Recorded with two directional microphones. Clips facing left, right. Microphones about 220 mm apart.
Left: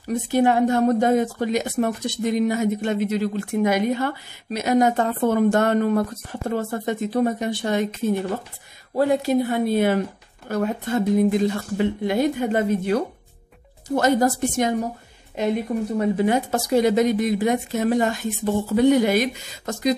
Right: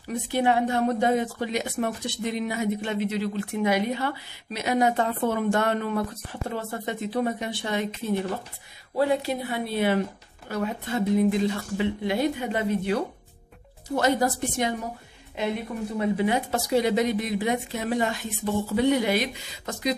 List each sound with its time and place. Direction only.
0.1 s speech: 45° left (ahead or behind)
8.9 s speech: 45° left (ahead or behind)
16.2 s speech: 45° left (ahead or behind)